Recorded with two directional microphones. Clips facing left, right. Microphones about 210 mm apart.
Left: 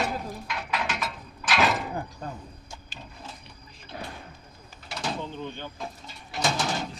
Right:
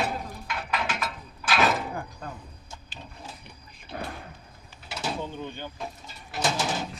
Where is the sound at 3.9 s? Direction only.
55° right (ahead or behind).